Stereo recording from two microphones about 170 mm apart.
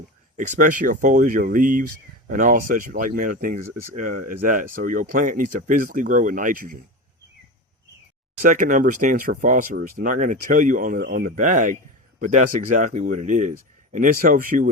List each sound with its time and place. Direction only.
0.3 s speech: 50° right (ahead or behind)
8.4 s speech: 50° right (ahead or behind)